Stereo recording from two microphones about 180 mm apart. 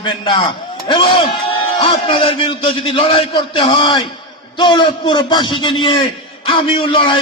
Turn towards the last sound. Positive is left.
turn(degrees=30)  # may be behind; listen again after turning